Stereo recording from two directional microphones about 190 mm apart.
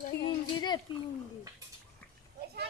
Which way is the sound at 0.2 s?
25° left (ahead or behind).